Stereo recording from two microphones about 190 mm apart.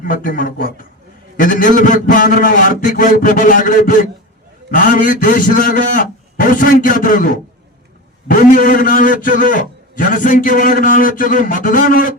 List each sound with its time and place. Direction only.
0.0 s a man's voice: 45° left (ahead or behind)
8.3 s a man's voice: 45° left (ahead or behind)